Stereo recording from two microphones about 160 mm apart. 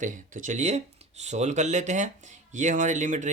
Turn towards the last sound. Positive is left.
turn(degrees=-50)  # may be behind; listen again after turning